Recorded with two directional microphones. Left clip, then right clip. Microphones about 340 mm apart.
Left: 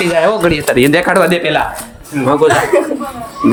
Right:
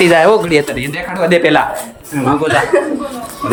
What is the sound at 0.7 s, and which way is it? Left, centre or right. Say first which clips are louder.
Speech: left 11 dB; centre.